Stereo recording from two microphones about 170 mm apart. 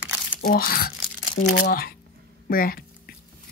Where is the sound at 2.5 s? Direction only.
60° left (ahead or behind).